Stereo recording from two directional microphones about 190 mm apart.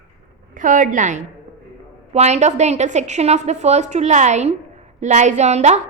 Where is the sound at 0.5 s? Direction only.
45° right (ahead or behind).